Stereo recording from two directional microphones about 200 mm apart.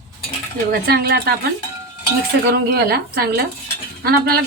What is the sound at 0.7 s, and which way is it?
Speech, 50° right (ahead or behind).